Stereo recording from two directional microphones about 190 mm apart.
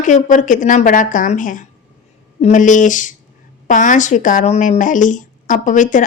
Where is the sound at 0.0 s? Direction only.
40° left (ahead or behind).